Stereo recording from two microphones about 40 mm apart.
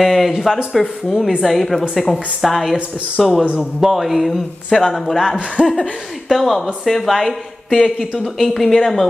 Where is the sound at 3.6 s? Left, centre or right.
Centre.